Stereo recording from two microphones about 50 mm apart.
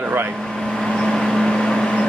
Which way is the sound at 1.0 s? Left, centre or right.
Centre.